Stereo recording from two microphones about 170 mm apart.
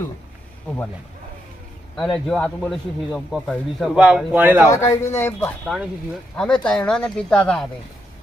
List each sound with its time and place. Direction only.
2.1 s speech: 5° left (ahead or behind)
4.6 s speech: 15° left (ahead or behind)
5.6 s speech: centre (ahead or behind)